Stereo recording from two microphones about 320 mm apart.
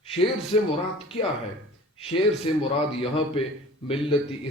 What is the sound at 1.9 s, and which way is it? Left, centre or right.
A man's voice, centre.